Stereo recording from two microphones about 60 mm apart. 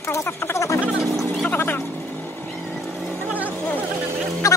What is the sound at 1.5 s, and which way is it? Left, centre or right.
Vehicle, left.